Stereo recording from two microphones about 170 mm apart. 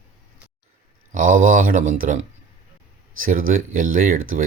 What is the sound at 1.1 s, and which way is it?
Speech, 50° right (ahead or behind).